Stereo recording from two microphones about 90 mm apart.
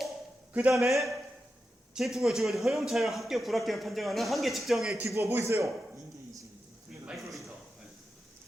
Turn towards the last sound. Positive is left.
turn(degrees=0)  # may be behind; listen again after turning